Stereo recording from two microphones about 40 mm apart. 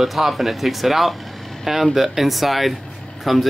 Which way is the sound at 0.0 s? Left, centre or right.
Centre.